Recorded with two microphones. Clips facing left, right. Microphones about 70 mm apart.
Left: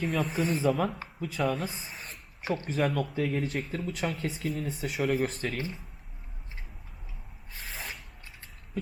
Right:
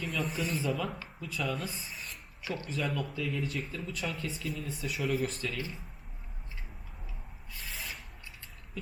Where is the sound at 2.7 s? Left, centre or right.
Left.